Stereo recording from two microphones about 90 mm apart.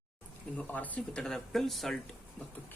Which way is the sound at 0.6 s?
15° left (ahead or behind).